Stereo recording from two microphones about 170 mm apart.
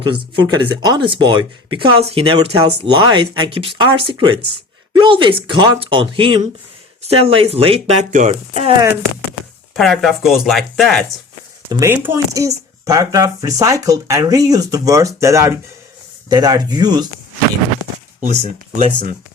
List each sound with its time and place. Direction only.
0.0 s speech: 30° right (ahead or behind)
9.7 s speech: centre (ahead or behind)
11.7 s speech: 15° right (ahead or behind)
18.2 s speech: 40° right (ahead or behind)